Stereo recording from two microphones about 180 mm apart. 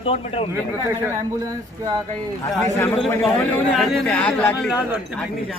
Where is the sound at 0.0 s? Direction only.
35° left (ahead or behind).